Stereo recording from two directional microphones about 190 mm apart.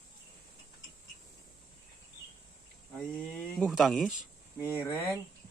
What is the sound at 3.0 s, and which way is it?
Speech, 5° left (ahead or behind).